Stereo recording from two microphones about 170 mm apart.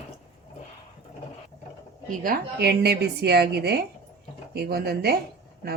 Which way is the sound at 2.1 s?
60° right (ahead or behind).